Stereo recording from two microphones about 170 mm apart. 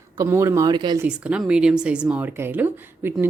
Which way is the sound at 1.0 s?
5° right (ahead or behind).